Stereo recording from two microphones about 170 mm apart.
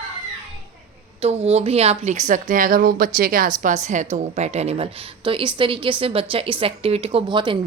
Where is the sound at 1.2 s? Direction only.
35° right (ahead or behind).